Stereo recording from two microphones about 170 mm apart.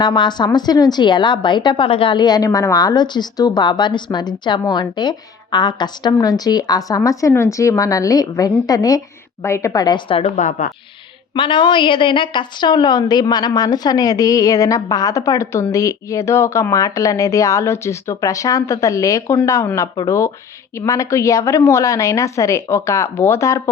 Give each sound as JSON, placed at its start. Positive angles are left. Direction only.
{"t": 0.0, "sound": "a woman's voice", "side_deg": 25}
{"t": 10.3, "sound": "speech", "side_deg": 45}
{"t": 11.3, "sound": "a woman's voice", "side_deg": 30}